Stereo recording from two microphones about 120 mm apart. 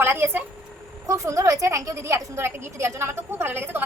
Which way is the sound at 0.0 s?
20° right (ahead or behind).